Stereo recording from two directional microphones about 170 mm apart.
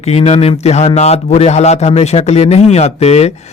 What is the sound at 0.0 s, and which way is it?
Speech, 40° left (ahead or behind).